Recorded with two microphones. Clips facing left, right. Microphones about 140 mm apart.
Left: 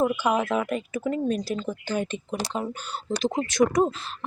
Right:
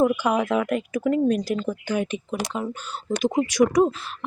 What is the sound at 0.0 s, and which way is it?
Speech, 10° right (ahead or behind).